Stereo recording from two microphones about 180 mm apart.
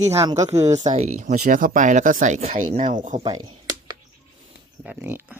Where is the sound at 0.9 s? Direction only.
40° right (ahead or behind).